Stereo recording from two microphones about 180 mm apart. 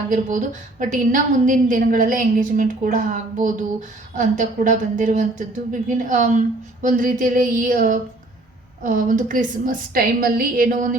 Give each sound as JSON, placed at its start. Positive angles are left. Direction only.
{"t": 0.1, "sound": "a woman's voice", "side_deg": -45}